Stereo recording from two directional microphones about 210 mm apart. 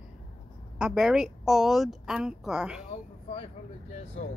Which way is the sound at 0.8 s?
5° right (ahead or behind).